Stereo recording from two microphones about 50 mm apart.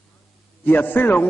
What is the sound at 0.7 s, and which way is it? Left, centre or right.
Speech, left.